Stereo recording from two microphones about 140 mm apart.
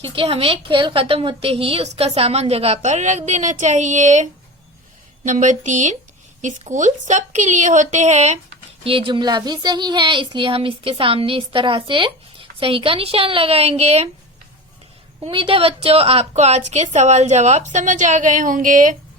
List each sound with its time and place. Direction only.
0.0 s a woman's voice: 40° right (ahead or behind)
8.8 s speech: 40° right (ahead or behind)
15.3 s a woman's voice: 40° right (ahead or behind); by 18.9 s 70° right (ahead or behind)